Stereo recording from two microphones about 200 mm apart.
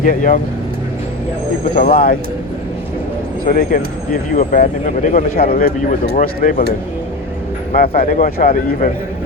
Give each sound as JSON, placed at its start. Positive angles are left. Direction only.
{"t": 0.0, "sound": "speech", "side_deg": 45}
{"t": 1.6, "sound": "speech", "side_deg": 45}
{"t": 3.4, "sound": "speech", "side_deg": 45}
{"t": 7.7, "sound": "speech", "side_deg": 40}